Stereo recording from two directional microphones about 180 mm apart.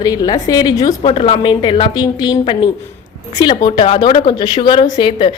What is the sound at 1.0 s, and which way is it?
A woman's voice, 30° left (ahead or behind).